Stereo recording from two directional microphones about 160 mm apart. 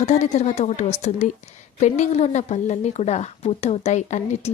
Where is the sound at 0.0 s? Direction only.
45° left (ahead or behind).